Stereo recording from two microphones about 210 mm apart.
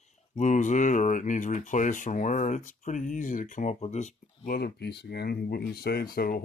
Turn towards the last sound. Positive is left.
turn(degrees=45)  # may be behind; listen again after turning